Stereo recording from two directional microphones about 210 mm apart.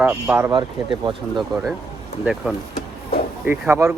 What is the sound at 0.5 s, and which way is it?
Speech, 25° right (ahead or behind).